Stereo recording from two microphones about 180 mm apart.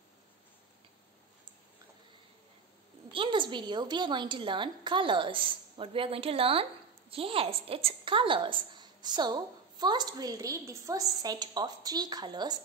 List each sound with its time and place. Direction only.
3.1 s a woman's voice: 30° right (ahead or behind)